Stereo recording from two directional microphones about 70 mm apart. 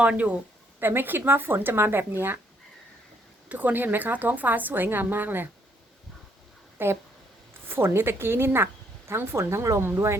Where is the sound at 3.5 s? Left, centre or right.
Right.